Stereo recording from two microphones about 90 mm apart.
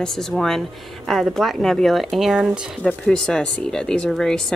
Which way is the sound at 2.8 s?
10° left (ahead or behind).